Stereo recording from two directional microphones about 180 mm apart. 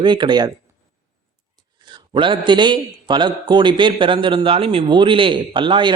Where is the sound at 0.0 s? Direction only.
25° right (ahead or behind).